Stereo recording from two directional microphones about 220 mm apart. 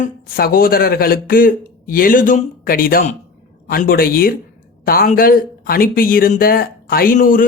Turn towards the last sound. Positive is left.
turn(degrees=40)  # may be behind; listen again after turning